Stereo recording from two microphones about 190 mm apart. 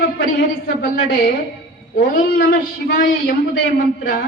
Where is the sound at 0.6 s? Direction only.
50° left (ahead or behind).